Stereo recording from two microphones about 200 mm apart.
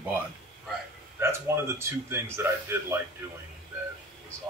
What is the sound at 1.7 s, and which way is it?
Speech, 10° right (ahead or behind).